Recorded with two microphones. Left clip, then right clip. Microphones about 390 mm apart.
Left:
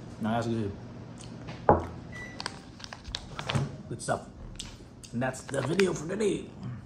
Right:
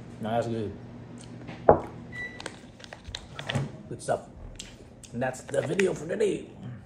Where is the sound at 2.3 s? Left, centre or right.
Centre.